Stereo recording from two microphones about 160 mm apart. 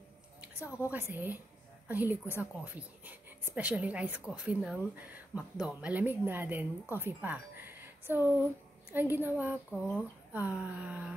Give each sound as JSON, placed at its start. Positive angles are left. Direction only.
{"t": 0.6, "sound": "a woman's voice", "side_deg": 15}
{"t": 0.9, "sound": "speech", "side_deg": -15}